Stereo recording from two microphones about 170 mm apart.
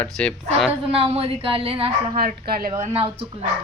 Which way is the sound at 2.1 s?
60° right (ahead or behind).